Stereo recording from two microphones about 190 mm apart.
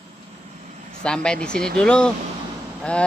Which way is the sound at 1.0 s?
5° left (ahead or behind).